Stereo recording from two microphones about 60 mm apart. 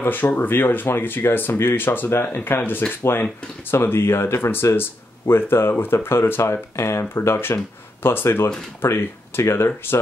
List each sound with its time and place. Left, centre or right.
0.1 s speech: left